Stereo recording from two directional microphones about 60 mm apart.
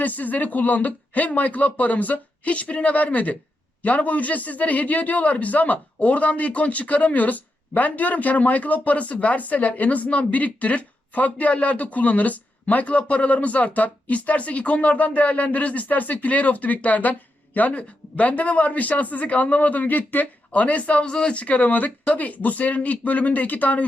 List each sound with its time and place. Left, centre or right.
0.0 s a man's voice: left